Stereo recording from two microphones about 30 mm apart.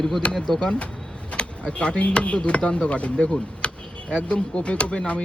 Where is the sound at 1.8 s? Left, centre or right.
Left.